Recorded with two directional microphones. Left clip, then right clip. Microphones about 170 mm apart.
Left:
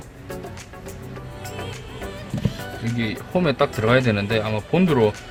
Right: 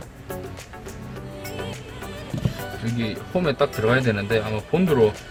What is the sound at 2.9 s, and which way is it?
Speech, 15° left (ahead or behind).